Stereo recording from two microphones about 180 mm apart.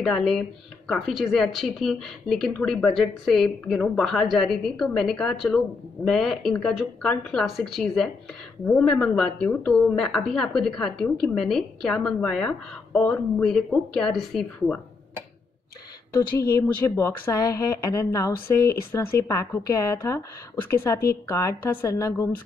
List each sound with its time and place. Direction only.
0.0 s speech: centre (ahead or behind)
16.1 s a woman's voice: 20° left (ahead or behind)